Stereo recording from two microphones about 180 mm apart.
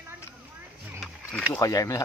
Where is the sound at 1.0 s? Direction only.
5° left (ahead or behind).